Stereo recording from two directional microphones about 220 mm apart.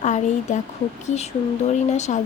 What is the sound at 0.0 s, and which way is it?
Speech, 35° left (ahead or behind).